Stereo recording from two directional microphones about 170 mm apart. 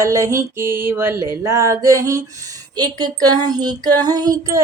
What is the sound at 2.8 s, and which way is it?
Child singing, 25° right (ahead or behind).